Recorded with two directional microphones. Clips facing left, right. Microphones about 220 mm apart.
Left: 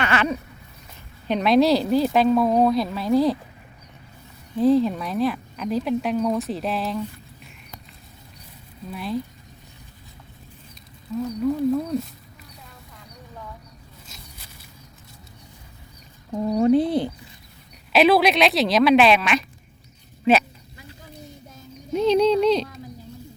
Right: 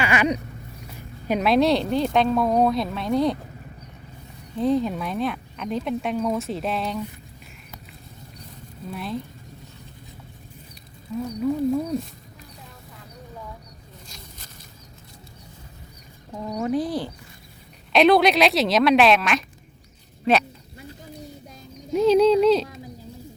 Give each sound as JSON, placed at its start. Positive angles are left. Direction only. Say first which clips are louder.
{"t": 0.0, "sound": "a sound", "louder": "right 1 dB", "side_deg": -15}
{"t": 0.9, "sound": "speech", "louder": "even", "side_deg": -5}
{"t": 4.5, "sound": "speech", "louder": "left 4 dB", "side_deg": 0}
{"t": 8.9, "sound": "speech", "louder": "left 3 dB", "side_deg": 0}
{"t": 11.4, "sound": "speech", "louder": "even", "side_deg": -10}
{"t": 14.1, "sound": "a sound", "louder": "even", "side_deg": 5}
{"t": 16.5, "sound": "speech", "louder": "left 6 dB", "side_deg": 30}
{"t": 17.9, "sound": "speech", "louder": "right 1 dB", "side_deg": 0}
{"t": 21.9, "sound": "speech", "louder": "right 2 dB", "side_deg": -5}